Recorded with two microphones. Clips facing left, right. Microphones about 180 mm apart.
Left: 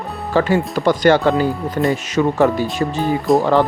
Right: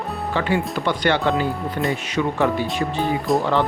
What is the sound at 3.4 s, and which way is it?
Speech, 40° left (ahead or behind).